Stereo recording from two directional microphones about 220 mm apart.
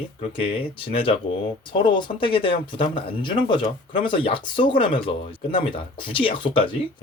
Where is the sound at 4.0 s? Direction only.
25° left (ahead or behind).